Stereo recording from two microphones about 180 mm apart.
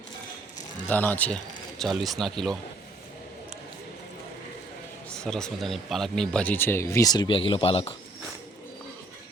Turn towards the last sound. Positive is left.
turn(degrees=30)  # may be behind; listen again after turning